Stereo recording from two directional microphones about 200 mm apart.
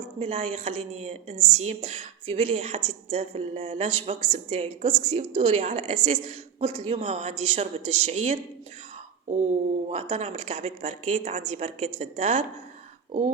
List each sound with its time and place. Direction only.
0.2 s a woman's voice: 35° right (ahead or behind)
1.4 s a woman's voice: 90° right
1.6 s a woman's voice: 35° right (ahead or behind)
9.9 s a woman's voice: 35° right (ahead or behind)